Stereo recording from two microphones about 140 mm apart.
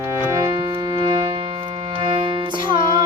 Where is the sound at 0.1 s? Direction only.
20° right (ahead or behind).